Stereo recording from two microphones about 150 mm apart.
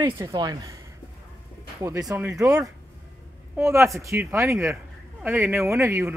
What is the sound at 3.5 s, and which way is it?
A man's voice, 20° right (ahead or behind).